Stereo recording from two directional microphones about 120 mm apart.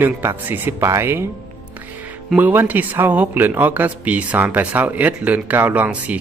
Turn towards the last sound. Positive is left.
turn(degrees=-10)  # may be behind; listen again after turning